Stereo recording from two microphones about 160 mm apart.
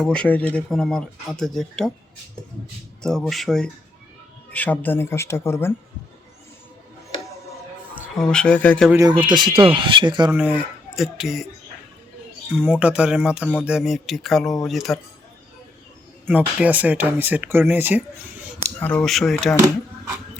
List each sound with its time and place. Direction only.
0.0 s speech: 5° left (ahead or behind)
3.0 s speech: centre (ahead or behind)
8.2 s speech: 5° left (ahead or behind)
9.2 s speech: 30° right (ahead or behind)
10.3 s speech: 10° right (ahead or behind)
12.7 s speech: 5° right (ahead or behind)
16.2 s speech: 10° right (ahead or behind)
18.8 s speech: 10° left (ahead or behind)